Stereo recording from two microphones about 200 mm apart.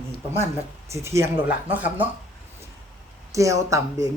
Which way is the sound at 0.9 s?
15° right (ahead or behind).